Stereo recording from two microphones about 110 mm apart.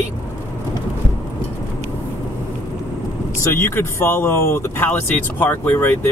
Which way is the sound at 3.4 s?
25° left (ahead or behind).